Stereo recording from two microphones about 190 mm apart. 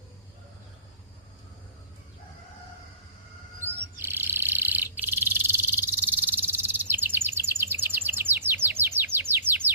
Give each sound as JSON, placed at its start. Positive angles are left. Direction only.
{"t": 3.6, "sound": "bird", "side_deg": -10}